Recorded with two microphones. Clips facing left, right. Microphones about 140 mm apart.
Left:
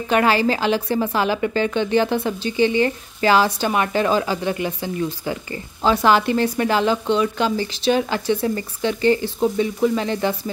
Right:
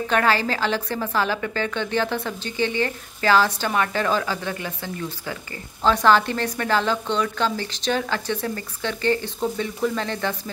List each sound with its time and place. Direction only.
0.1 s a woman's voice: 15° left (ahead or behind)